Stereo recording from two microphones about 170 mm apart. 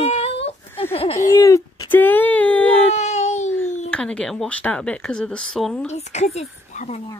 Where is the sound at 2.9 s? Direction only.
45° left (ahead or behind).